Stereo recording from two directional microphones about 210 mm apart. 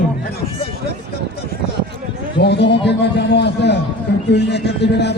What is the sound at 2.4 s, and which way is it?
A man's voice, 55° left (ahead or behind).